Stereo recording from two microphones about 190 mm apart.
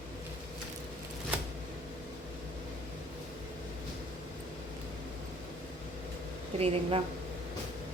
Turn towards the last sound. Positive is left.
turn(degrees=-30)  # may be behind; listen again after turning